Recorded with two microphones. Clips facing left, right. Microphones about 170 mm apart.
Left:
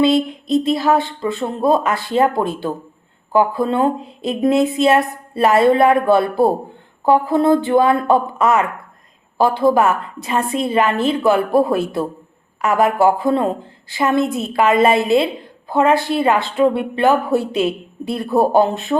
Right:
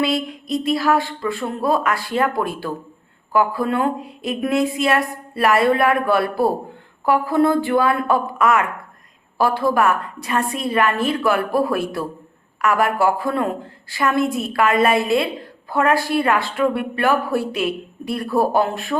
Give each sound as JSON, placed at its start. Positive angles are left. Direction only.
{"t": 0.0, "sound": "speech", "side_deg": 25}